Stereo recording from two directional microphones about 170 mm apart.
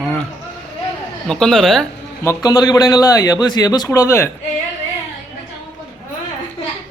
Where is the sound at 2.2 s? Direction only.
20° left (ahead or behind).